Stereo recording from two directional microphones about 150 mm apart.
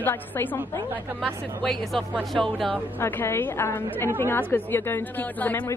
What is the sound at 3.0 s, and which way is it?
A woman's voice, 15° left (ahead or behind).